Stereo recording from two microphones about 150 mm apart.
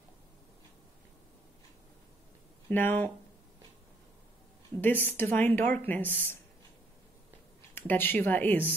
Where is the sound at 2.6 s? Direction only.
15° left (ahead or behind).